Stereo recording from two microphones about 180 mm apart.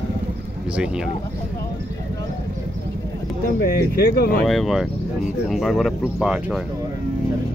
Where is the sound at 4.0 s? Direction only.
55° left (ahead or behind).